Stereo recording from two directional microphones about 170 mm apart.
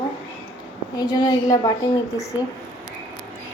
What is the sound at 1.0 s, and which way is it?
A woman's voice, 25° left (ahead or behind).